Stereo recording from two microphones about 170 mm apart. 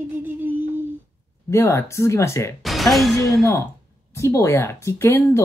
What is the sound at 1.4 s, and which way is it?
Speech, 15° left (ahead or behind).